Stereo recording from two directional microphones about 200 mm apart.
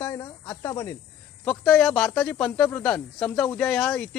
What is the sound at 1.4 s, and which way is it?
Speech, centre (ahead or behind).